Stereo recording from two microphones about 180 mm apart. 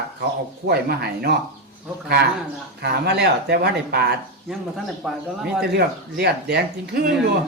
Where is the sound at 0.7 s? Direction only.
60° right (ahead or behind).